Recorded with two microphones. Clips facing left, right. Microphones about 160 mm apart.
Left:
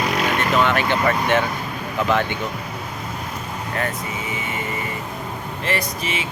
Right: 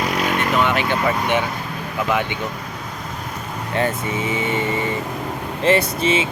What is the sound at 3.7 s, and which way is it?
Speech, 30° right (ahead or behind).